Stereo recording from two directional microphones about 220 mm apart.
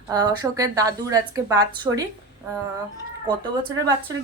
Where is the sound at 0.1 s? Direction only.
15° right (ahead or behind).